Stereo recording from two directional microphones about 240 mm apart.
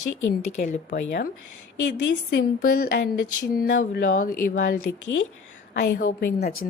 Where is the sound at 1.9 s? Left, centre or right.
Left.